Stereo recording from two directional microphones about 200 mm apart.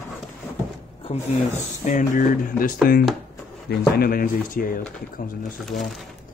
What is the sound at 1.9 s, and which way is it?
Speech, 40° left (ahead or behind).